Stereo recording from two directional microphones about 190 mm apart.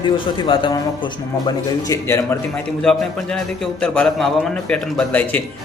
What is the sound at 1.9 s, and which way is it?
Speech, 15° left (ahead or behind).